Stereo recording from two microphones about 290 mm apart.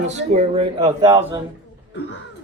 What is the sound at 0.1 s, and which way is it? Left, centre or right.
A man's voice, right.